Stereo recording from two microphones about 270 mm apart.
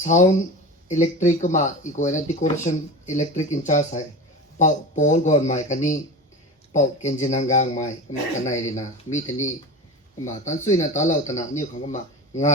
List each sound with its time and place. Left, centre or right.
0.0 s speech: left